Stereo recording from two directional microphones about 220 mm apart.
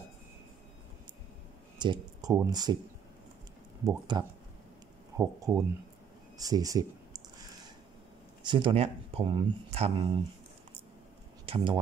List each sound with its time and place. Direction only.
1.8 s speech: 20° right (ahead or behind)
4.1 s speech: 20° right (ahead or behind)
6.3 s a sound: 15° right (ahead or behind)
8.5 s speech: 20° right (ahead or behind)
11.4 s speech: 25° right (ahead or behind)